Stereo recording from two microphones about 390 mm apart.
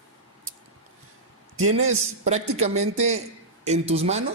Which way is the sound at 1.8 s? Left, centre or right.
Centre.